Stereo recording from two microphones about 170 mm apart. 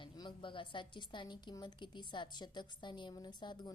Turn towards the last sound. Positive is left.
turn(degrees=25)  # may be behind; listen again after turning